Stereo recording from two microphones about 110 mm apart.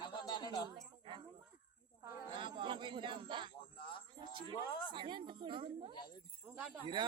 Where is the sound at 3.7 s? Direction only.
50° left (ahead or behind).